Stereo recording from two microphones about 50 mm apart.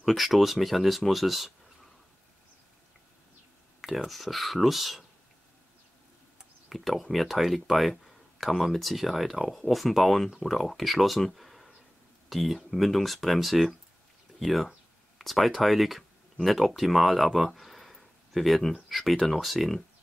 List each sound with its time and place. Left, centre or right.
0.0 s speech: centre
3.8 s speech: centre
6.7 s speech: centre